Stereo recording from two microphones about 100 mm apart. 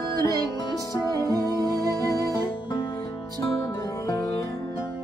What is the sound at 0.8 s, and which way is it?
Music, 30° left (ahead or behind).